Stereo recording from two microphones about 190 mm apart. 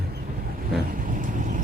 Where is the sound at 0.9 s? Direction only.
45° right (ahead or behind).